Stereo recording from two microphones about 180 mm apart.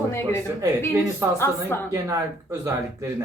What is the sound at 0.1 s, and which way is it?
A woman's voice, 15° left (ahead or behind).